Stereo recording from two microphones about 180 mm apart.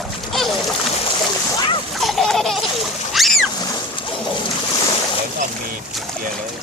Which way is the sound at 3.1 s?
Centre (ahead or behind).